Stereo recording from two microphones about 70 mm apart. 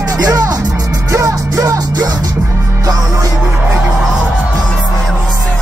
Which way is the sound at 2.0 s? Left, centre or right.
Right.